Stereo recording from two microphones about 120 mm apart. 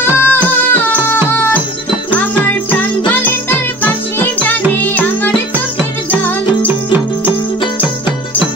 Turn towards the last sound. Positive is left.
turn(degrees=-15)  # may be behind; listen again after turning